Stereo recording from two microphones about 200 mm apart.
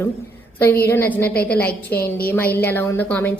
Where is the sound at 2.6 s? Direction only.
10° left (ahead or behind).